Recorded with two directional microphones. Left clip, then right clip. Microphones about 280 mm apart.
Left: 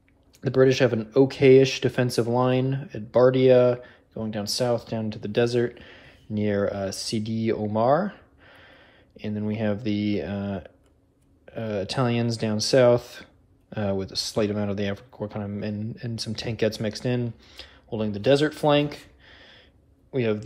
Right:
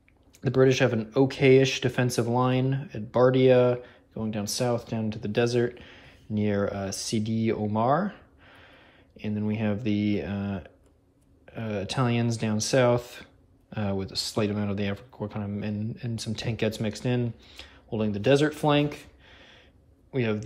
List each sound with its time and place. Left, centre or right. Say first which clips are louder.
0.6 s speech: left 2 dB; centre
9.2 s a man's voice: left 2 dB; centre